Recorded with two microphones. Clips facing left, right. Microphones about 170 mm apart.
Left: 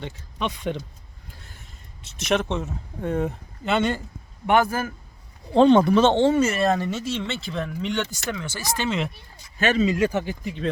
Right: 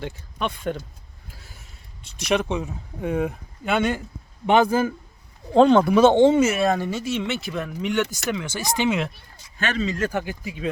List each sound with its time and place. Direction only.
0.0 s speech: centre (ahead or behind)
1.3 s a sound: 5° right (ahead or behind)
3.2 s speech: centre (ahead or behind)
4.4 s a man's voice: 20° right (ahead or behind)
5.5 s speech: 5° right (ahead or behind)
6.5 s speech: centre (ahead or behind)
6.8 s speech: 15° right (ahead or behind)
9.7 s speech: 5° left (ahead or behind)